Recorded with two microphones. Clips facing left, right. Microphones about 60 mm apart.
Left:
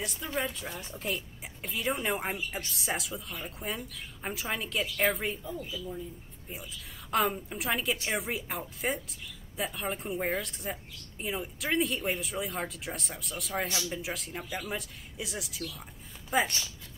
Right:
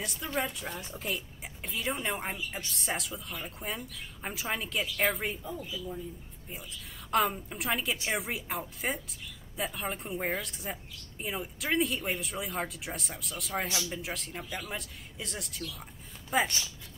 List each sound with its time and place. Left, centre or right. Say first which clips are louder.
0.0 s a woman's voice: even; centre